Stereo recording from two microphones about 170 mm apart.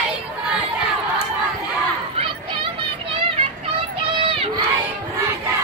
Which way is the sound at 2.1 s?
30° right (ahead or behind).